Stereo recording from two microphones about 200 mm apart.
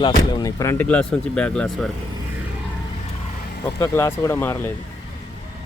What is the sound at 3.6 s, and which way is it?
Speech, 10° left (ahead or behind).